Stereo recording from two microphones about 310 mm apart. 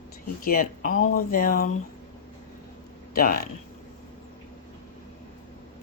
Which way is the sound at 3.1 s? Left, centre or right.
Left.